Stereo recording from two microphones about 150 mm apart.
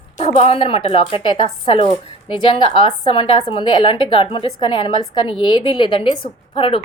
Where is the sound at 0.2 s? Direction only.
40° left (ahead or behind).